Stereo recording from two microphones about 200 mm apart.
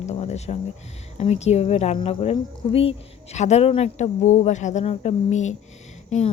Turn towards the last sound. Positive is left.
turn(degrees=35)  # may be behind; listen again after turning